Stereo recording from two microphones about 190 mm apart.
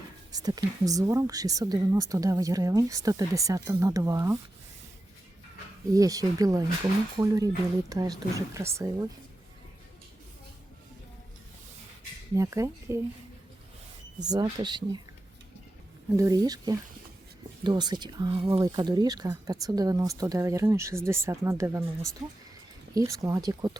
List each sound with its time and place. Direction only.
0.3 s speech: 20° right (ahead or behind)
5.9 s speech: 20° right (ahead or behind)
12.4 s speech: 15° right (ahead or behind)
14.2 s speech: 20° right (ahead or behind)
16.0 s speech: 15° right (ahead or behind)
23.0 s speech: 15° right (ahead or behind)